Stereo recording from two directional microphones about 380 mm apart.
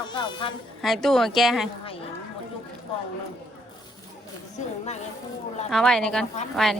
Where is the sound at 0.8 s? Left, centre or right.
Centre.